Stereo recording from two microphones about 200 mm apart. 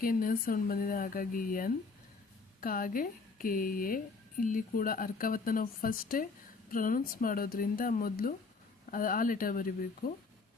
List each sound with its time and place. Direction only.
0.0 s speech: 45° left (ahead or behind)